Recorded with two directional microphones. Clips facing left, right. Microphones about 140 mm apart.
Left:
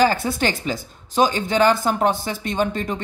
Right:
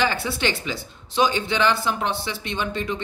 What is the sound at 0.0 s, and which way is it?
A woman's voice, 45° left (ahead or behind).